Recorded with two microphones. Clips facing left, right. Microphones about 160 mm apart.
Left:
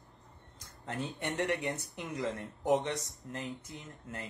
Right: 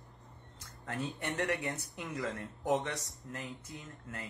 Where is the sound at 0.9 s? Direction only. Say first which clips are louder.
Left 1 dB; 20° left (ahead or behind).